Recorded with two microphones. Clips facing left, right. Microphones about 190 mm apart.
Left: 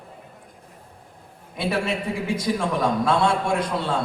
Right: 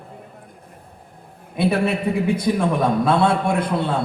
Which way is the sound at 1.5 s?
60° right (ahead or behind).